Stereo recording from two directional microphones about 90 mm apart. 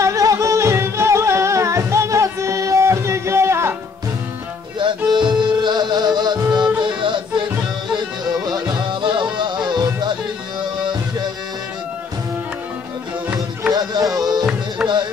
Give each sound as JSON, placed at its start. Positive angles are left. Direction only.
{"t": 0.0, "sound": "music", "side_deg": -35}
{"t": 4.7, "sound": "music", "side_deg": -60}
{"t": 9.0, "sound": "music", "side_deg": -65}
{"t": 13.7, "sound": "music", "side_deg": -45}